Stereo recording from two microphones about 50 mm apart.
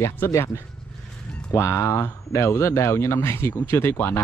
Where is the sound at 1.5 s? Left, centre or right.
Left.